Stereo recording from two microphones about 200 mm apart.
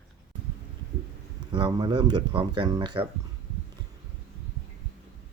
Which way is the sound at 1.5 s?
25° right (ahead or behind).